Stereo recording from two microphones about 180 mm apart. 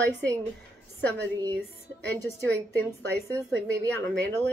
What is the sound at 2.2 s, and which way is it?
Speech, 10° left (ahead or behind).